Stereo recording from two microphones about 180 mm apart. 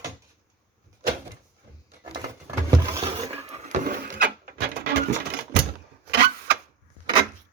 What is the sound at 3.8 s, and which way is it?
Wood, 50° right (ahead or behind).